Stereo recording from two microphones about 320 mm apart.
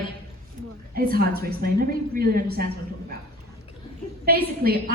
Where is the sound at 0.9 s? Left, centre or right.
Right.